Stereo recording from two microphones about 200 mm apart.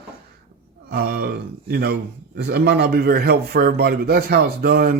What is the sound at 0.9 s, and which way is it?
A man's voice, 55° right (ahead or behind).